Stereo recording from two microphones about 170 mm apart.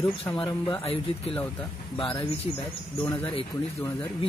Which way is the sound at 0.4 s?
30° left (ahead or behind).